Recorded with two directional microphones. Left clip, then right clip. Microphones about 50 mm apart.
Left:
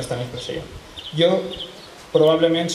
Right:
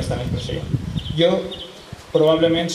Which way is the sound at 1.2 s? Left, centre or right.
Centre.